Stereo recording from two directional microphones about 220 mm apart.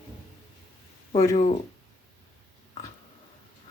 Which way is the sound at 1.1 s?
15° left (ahead or behind).